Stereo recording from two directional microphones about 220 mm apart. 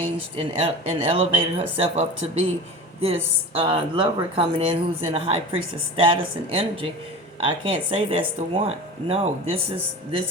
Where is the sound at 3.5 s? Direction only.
25° right (ahead or behind).